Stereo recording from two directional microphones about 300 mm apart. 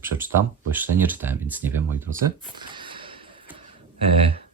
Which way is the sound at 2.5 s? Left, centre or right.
Centre.